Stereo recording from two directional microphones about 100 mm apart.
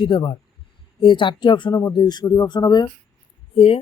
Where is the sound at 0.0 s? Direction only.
60° left (ahead or behind).